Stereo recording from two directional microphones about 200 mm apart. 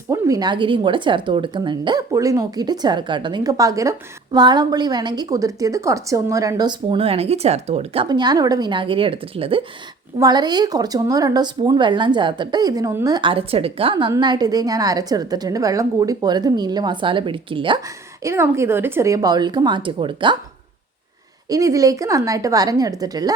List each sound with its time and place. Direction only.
0.1 s speech: 20° right (ahead or behind)
8.0 s speech: 20° right (ahead or behind)
21.5 s a woman's voice: 15° right (ahead or behind)